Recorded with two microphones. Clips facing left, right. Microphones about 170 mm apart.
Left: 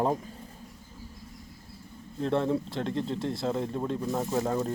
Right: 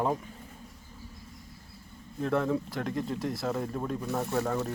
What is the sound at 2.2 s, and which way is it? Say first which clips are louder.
Speech: left 1 dB; 25° left (ahead or behind).